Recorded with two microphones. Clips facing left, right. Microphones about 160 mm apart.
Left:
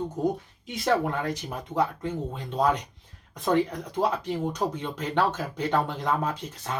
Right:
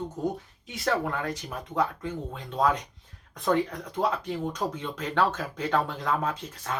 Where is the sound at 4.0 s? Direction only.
15° left (ahead or behind).